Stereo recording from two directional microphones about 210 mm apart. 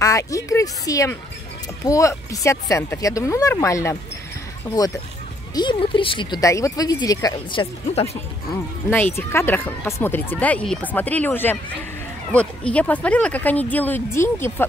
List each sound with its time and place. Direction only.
0.0 s speech: 15° left (ahead or behind)
7.9 s speech: 30° left (ahead or behind)
8.9 s speech: 10° left (ahead or behind)